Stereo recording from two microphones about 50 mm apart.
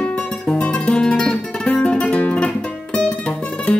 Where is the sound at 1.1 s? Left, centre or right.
Centre.